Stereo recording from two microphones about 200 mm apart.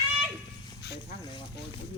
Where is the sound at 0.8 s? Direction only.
55° left (ahead or behind).